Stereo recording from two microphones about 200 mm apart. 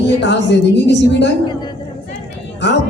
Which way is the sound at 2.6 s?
60° left (ahead or behind).